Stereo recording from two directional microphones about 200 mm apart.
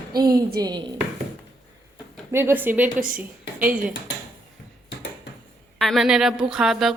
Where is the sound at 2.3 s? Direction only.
10° right (ahead or behind).